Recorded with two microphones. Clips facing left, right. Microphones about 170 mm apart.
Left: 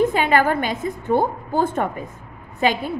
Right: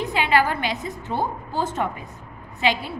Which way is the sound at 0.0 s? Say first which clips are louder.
Left 4 dB; 50° left (ahead or behind).